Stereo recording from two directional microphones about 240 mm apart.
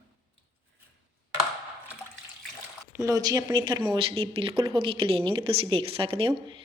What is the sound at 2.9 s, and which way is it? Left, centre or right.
Speech, centre.